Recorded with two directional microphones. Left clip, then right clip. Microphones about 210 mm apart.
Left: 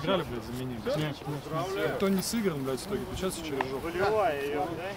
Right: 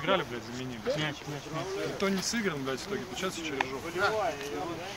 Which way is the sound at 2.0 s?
35° left (ahead or behind).